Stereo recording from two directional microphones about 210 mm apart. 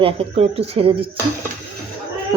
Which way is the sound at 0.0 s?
30° right (ahead or behind).